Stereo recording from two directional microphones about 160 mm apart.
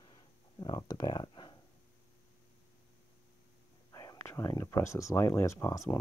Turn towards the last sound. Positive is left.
turn(degrees=20)  # may be behind; listen again after turning